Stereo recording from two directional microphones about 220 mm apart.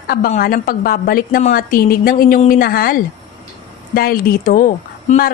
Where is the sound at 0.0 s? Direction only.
40° left (ahead or behind).